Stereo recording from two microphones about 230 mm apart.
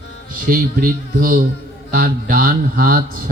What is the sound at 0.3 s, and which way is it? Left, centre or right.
Speech, right.